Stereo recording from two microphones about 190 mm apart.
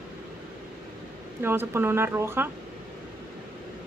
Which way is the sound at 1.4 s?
10° right (ahead or behind).